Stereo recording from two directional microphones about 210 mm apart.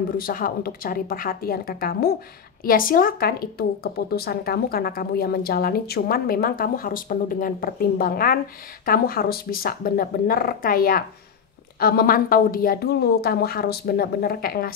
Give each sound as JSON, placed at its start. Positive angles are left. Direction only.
{"t": 0.2, "sound": "speech", "side_deg": 40}